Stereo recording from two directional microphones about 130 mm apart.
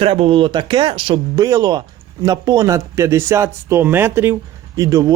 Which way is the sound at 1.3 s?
30° right (ahead or behind).